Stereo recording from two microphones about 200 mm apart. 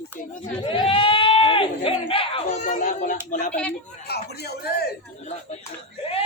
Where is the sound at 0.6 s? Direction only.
25° left (ahead or behind).